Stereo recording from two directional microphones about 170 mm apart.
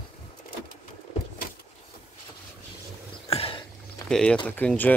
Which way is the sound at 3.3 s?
35° left (ahead or behind).